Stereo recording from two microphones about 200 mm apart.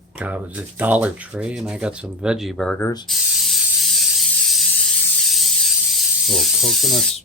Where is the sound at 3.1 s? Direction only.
Centre (ahead or behind).